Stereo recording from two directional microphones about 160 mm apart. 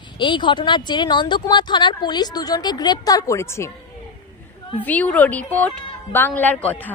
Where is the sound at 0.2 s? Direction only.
30° left (ahead or behind).